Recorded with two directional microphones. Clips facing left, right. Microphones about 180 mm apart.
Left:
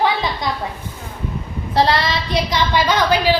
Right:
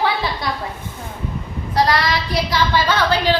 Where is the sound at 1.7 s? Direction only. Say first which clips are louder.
Left 1 dB; 25° left (ahead or behind).